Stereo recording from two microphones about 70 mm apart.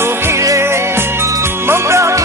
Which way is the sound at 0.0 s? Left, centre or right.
Right.